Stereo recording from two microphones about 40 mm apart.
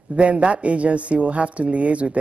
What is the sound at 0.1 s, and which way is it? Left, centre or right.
A woman's voice, right.